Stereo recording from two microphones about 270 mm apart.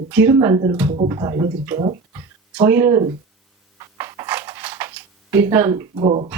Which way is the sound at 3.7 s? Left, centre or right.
Centre.